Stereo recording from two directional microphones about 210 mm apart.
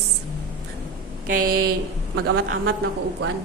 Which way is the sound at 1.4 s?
45° right (ahead or behind).